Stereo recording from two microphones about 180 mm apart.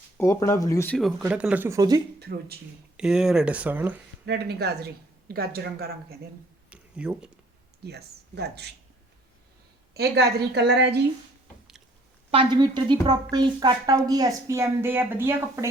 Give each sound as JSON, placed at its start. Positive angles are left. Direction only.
{"t": 0.2, "sound": "speech", "side_deg": 15}
{"t": 1.3, "sound": "speech", "side_deg": -5}
{"t": 2.1, "sound": "speech", "side_deg": -65}
{"t": 3.0, "sound": "speech", "side_deg": -5}
{"t": 4.3, "sound": "speech", "side_deg": -65}
{"t": 6.7, "sound": "a sound", "side_deg": -5}
{"t": 7.9, "sound": "speech", "side_deg": -65}
{"t": 9.9, "sound": "a woman's voice", "side_deg": -65}
{"t": 12.3, "sound": "a woman's voice", "side_deg": -30}